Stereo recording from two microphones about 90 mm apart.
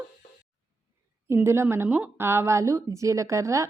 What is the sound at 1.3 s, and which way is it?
A woman's voice, 30° right (ahead or behind).